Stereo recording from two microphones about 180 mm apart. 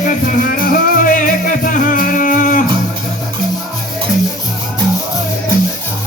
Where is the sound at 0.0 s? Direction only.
45° left (ahead or behind).